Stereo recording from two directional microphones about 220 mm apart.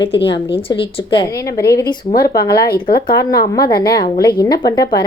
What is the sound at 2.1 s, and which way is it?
Speech, 45° left (ahead or behind).